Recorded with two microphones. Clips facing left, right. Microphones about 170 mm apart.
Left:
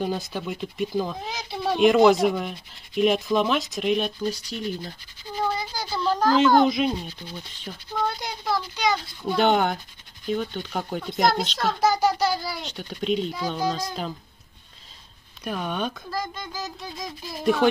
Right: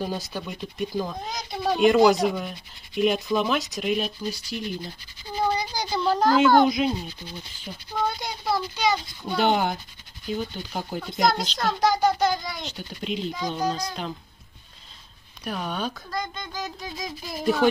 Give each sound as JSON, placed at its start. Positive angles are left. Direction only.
{"t": 0.0, "sound": "speech", "side_deg": 0}
{"t": 5.3, "sound": "a sound", "side_deg": -15}
{"t": 5.9, "sound": "speech", "side_deg": -5}
{"t": 8.2, "sound": "speech", "side_deg": -5}
{"t": 15.4, "sound": "speech", "side_deg": 0}